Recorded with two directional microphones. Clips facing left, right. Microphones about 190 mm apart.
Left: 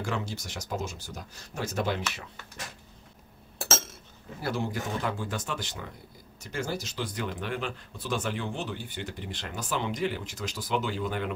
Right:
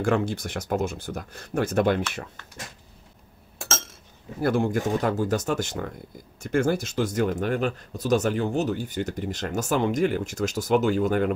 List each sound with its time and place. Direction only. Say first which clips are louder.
0.0 s speech: right 9 dB; 55° right (ahead or behind)
4.4 s speech: right 8 dB; 55° right (ahead or behind)